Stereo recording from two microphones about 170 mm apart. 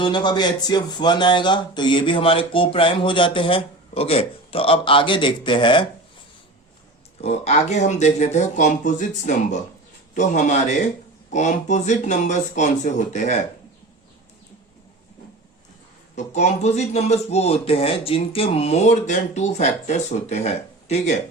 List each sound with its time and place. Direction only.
0.0 s speech: 25° left (ahead or behind)
7.2 s speech: 40° left (ahead or behind)
16.1 s speech: 40° left (ahead or behind)